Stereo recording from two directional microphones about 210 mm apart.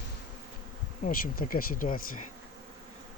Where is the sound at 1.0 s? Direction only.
40° left (ahead or behind).